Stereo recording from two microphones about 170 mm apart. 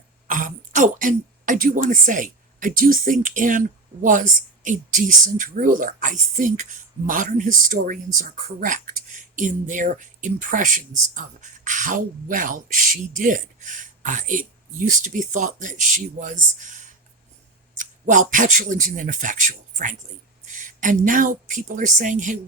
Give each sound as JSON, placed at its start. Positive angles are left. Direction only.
{"t": 0.3, "sound": "speech", "side_deg": -50}
{"t": 4.6, "sound": "speech", "side_deg": -50}